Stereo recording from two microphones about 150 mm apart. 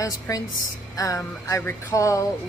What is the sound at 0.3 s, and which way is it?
Speech, 20° left (ahead or behind).